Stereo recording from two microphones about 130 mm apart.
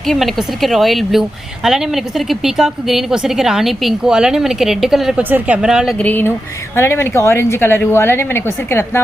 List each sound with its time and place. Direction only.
0.1 s a woman's voice: centre (ahead or behind)
6.0 s a woman's voice: 15° left (ahead or behind)